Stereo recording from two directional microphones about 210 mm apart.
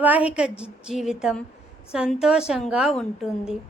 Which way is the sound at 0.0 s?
5° right (ahead or behind).